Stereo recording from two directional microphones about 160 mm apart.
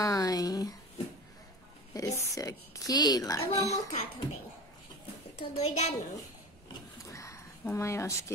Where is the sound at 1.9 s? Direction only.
20° left (ahead or behind).